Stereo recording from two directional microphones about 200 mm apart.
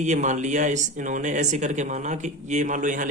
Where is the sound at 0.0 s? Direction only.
35° right (ahead or behind).